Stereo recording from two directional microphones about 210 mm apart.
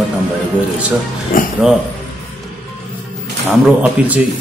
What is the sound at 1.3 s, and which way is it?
Speech, 40° left (ahead or behind).